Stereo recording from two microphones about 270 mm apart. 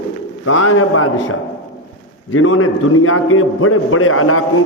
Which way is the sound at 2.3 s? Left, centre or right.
Left.